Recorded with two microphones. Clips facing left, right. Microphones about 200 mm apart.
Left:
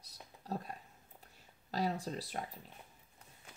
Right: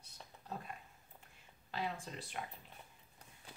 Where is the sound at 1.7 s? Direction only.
40° left (ahead or behind).